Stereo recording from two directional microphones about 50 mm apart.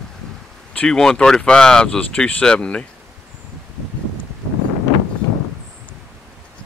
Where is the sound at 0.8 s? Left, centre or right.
Centre.